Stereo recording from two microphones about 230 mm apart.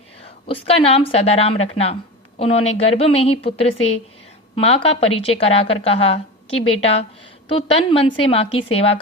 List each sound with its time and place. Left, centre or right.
0.4 s a woman's voice: left
7.5 s a woman's voice: left